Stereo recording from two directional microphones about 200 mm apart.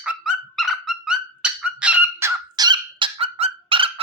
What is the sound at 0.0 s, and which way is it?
Dog, 5° right (ahead or behind).